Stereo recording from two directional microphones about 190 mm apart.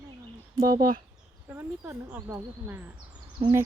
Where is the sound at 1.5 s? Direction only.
10° right (ahead or behind).